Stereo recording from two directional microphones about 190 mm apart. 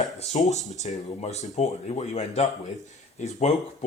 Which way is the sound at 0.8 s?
35° left (ahead or behind).